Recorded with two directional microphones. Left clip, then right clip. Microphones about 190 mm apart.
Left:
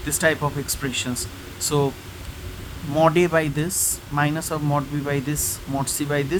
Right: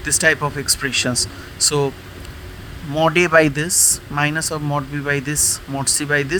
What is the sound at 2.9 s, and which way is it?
Speech, 20° right (ahead or behind).